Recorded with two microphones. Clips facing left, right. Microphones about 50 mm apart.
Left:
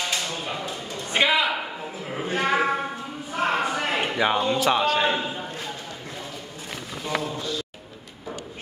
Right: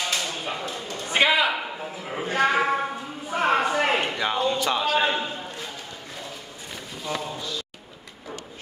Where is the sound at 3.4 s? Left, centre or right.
Right.